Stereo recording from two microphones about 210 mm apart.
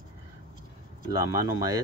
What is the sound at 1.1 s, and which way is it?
Speech, 15° right (ahead or behind).